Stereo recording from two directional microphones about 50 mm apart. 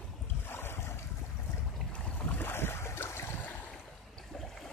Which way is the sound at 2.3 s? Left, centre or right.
Left.